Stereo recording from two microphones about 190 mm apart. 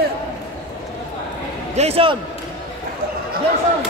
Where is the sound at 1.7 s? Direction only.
35° right (ahead or behind).